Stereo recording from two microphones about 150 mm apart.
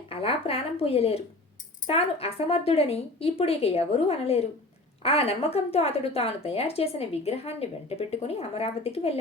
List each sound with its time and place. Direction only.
0.1 s a woman's voice: 40° left (ahead or behind)